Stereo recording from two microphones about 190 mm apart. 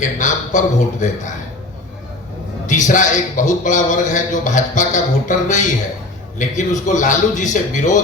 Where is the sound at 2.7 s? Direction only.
40° left (ahead or behind).